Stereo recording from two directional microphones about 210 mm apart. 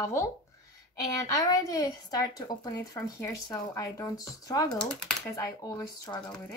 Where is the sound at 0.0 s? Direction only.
15° left (ahead or behind).